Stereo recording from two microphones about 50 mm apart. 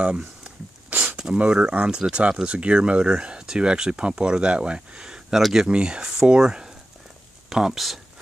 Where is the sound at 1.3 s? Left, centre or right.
Centre.